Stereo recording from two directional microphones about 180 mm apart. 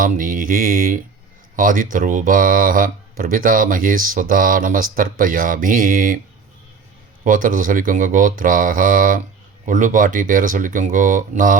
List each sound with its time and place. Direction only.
0.0 s speech: 50° right (ahead or behind)
7.3 s speech: 50° right (ahead or behind)